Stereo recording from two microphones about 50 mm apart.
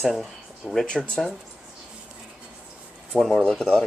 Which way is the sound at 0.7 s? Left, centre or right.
Centre.